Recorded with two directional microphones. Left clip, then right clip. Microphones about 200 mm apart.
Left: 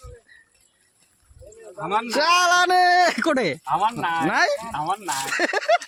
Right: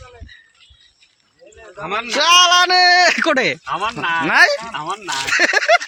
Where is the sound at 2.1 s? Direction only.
15° left (ahead or behind); by 4.5 s centre (ahead or behind).